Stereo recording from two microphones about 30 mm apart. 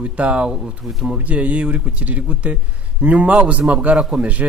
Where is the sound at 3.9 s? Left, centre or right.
Right.